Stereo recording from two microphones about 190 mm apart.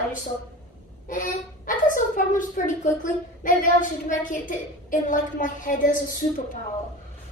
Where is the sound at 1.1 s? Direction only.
45° left (ahead or behind).